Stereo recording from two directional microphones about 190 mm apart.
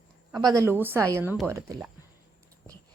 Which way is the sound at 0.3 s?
15° right (ahead or behind).